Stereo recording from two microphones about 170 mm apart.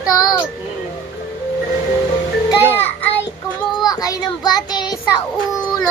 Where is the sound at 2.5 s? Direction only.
15° left (ahead or behind).